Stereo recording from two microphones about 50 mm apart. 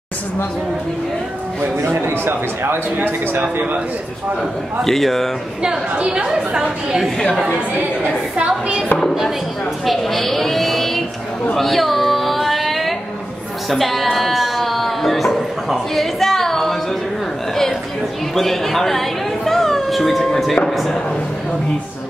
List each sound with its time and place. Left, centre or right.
2.0 s a man's voice: right
3.0 s a man's voice: right
4.8 s speech: centre
5.6 s a woman's voice: centre
8.5 s a sound: centre
9.8 s a sound: centre
13.7 s a woman's voice: centre
14.1 s a sound: centre
18.3 s a woman's voice: centre